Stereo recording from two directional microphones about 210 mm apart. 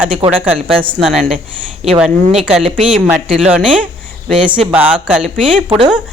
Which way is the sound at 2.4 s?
5° right (ahead or behind).